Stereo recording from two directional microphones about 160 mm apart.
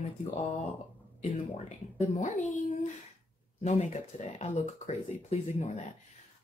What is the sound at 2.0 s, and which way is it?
Speech, 50° left (ahead or behind).